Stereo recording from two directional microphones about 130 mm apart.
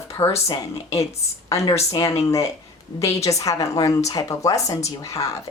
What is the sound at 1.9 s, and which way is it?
A woman's voice, 25° left (ahead or behind).